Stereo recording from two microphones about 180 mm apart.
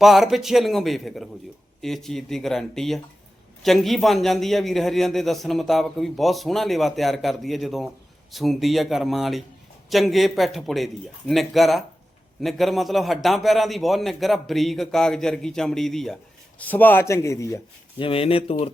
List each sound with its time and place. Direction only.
0.0 s a man's voice: centre (ahead or behind); by 17.6 s 15° left (ahead or behind)
18.0 s speech: 30° left (ahead or behind)